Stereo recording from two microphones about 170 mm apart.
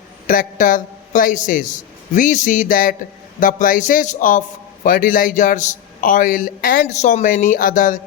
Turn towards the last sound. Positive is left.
turn(degrees=50)  # may be behind; listen again after turning